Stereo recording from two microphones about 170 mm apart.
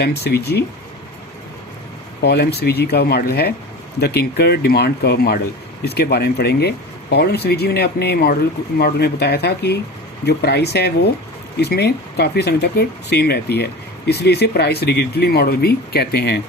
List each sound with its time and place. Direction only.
0.0 s speech: 70° left (ahead or behind)
2.2 s speech: 70° left (ahead or behind)